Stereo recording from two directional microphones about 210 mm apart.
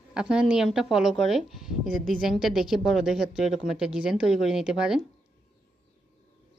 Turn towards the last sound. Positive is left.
turn(degrees=-5)  # may be behind; listen again after turning